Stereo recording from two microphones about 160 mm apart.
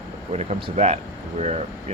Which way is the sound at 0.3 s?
40° right (ahead or behind).